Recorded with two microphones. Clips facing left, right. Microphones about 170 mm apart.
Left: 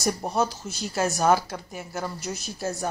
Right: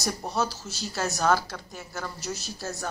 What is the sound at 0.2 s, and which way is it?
Speech, 20° left (ahead or behind).